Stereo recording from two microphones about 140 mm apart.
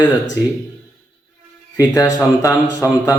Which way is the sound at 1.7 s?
25° left (ahead or behind).